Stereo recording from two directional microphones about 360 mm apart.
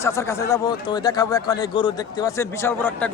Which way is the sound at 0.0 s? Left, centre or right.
Centre.